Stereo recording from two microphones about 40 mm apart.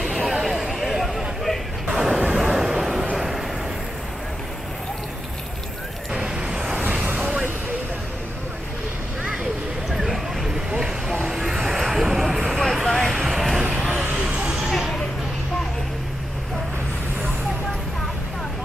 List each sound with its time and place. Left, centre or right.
0.0 s vehicle: centre
1.9 s vehicle: centre
6.1 s vehicle: right
6.8 s vehicle: right
9.8 s a sound: centre
11.2 s vehicle: centre
12.8 s vehicle: centre
14.2 s a sound: right
14.5 s a sound: centre